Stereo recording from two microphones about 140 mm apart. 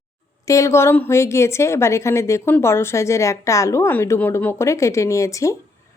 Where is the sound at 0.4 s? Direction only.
20° left (ahead or behind).